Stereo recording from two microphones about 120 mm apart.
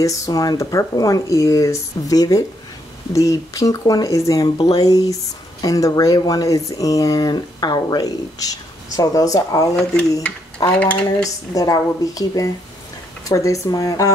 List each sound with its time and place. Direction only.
0.0 s speech: 25° left (ahead or behind)
10.8 s speech: 10° left (ahead or behind)
11.5 s speech: 30° left (ahead or behind)